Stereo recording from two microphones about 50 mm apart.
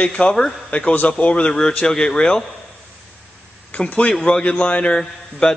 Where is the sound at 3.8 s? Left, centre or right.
Left.